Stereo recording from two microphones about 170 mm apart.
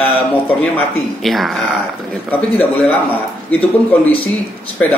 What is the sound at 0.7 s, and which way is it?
Speech, centre (ahead or behind).